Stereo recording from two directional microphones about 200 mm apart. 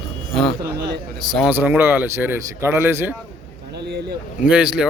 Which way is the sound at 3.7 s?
55° right (ahead or behind).